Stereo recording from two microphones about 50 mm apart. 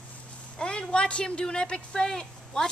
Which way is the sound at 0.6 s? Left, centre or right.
Centre.